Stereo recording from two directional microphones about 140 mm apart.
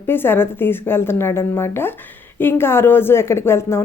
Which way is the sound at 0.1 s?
15° left (ahead or behind).